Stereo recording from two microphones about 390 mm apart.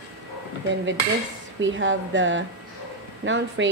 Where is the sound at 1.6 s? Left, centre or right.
Right.